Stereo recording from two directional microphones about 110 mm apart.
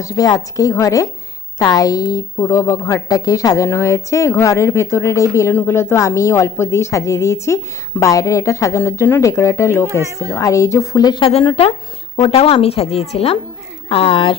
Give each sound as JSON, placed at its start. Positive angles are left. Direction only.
{"t": 0.0, "sound": "a woman's voice", "side_deg": 35}
{"t": 11.4, "sound": "a woman's voice", "side_deg": 55}